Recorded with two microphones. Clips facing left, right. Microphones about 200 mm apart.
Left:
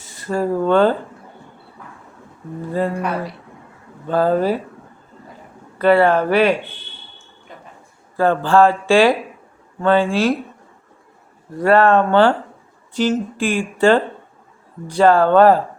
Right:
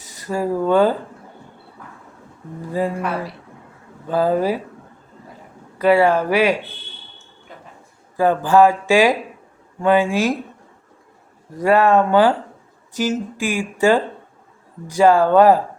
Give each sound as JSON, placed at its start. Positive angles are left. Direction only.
{"t": 0.3, "sound": "speech", "side_deg": -10}
{"t": 2.7, "sound": "speech", "side_deg": -5}
{"t": 5.8, "sound": "speech", "side_deg": -10}
{"t": 8.1, "sound": "speech", "side_deg": -10}
{"t": 11.6, "sound": "speech", "side_deg": -10}